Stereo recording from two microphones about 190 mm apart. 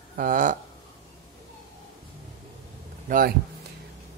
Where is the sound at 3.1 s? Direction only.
50° right (ahead or behind).